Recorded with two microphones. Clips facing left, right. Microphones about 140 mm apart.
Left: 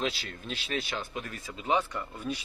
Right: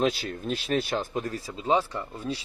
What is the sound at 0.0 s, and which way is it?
Speech, 45° right (ahead or behind).